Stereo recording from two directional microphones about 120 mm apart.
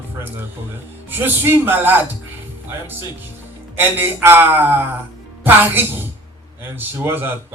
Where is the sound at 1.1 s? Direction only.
15° right (ahead or behind).